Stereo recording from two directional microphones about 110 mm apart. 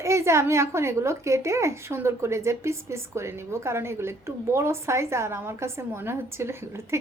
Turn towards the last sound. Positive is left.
turn(degrees=-25)  # may be behind; listen again after turning